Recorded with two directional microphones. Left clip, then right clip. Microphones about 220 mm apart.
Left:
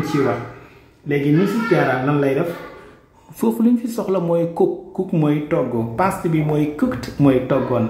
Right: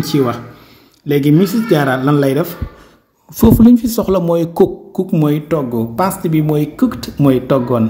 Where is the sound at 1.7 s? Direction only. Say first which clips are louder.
Right 5 dB; 50° right (ahead or behind).